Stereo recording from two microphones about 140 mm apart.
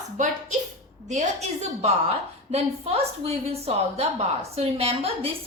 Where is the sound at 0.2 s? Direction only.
60° right (ahead or behind).